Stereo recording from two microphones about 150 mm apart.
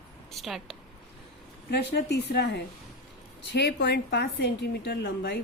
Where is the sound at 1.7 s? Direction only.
90° left.